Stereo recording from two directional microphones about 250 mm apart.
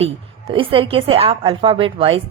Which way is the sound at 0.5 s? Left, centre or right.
Right.